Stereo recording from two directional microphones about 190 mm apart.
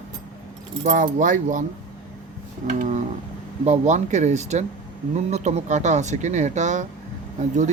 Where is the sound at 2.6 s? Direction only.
40° right (ahead or behind).